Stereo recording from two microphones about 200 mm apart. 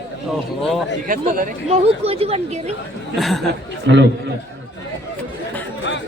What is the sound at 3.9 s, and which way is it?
Speech, 60° right (ahead or behind).